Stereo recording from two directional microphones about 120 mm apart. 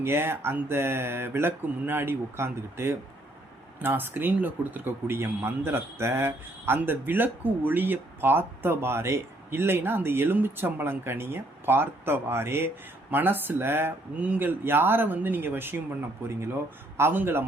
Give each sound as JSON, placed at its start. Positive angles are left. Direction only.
{"t": 0.0, "sound": "speech", "side_deg": -20}
{"t": 17.0, "sound": "speech", "side_deg": -20}